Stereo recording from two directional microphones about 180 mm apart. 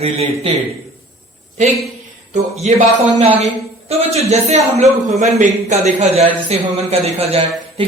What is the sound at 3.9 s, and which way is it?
Speech, 35° right (ahead or behind).